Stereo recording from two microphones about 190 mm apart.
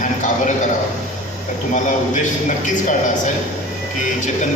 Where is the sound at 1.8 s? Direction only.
40° left (ahead or behind).